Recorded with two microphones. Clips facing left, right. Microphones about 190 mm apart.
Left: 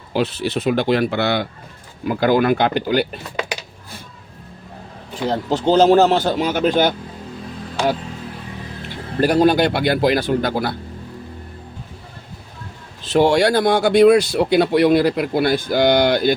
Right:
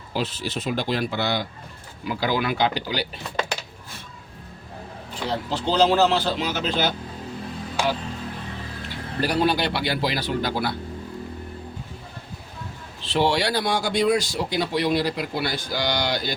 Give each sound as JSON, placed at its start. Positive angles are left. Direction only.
{"t": 0.1, "sound": "speech", "side_deg": 60}
{"t": 2.0, "sound": "speech", "side_deg": 50}
{"t": 5.3, "sound": "speech", "side_deg": 45}
{"t": 9.2, "sound": "speech", "side_deg": 50}
{"t": 13.0, "sound": "speech", "side_deg": 45}